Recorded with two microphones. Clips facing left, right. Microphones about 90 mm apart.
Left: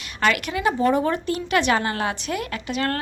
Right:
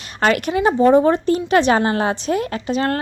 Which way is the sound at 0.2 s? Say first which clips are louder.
Right 5 dB; 35° right (ahead or behind).